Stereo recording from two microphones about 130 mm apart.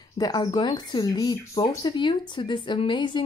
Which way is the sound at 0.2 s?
30° left (ahead or behind).